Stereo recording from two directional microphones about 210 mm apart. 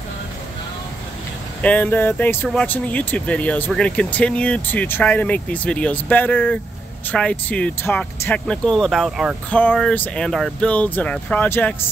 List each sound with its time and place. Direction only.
1.6 s speech: 5° left (ahead or behind)